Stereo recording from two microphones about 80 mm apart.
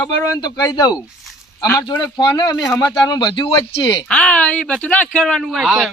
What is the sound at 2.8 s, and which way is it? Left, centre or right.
Speech, left.